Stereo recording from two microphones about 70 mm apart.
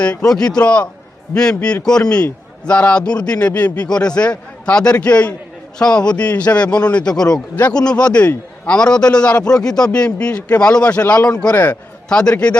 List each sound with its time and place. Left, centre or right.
0.0 s a man's voice: centre
11.5 s a man's voice: left
12.0 s a man's voice: centre